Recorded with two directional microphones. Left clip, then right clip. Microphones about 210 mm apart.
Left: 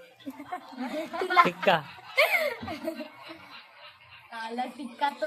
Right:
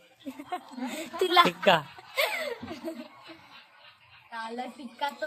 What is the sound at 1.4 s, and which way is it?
Speech, 15° right (ahead or behind).